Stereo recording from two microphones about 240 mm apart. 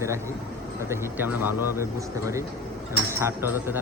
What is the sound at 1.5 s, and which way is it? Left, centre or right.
A man's voice, centre.